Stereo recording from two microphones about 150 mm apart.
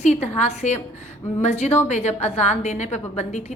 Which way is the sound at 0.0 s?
50° left (ahead or behind).